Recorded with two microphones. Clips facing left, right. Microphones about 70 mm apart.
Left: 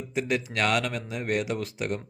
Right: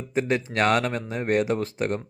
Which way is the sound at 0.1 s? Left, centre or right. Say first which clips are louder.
Right 4 dB; right.